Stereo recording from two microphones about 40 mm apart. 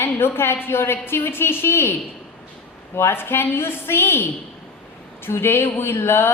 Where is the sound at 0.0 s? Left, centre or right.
Left.